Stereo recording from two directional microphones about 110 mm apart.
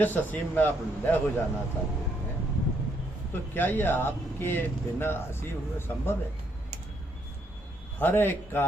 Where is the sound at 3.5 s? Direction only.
15° left (ahead or behind).